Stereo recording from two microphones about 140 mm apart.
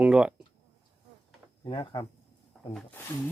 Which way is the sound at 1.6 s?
35° left (ahead or behind).